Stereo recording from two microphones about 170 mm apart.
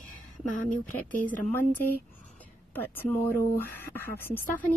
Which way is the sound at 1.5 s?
10° left (ahead or behind).